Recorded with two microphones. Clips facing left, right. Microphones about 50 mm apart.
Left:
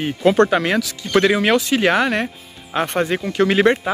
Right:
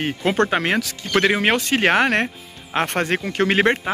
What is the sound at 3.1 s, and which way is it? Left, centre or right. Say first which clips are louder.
Speech: left 2 dB; right.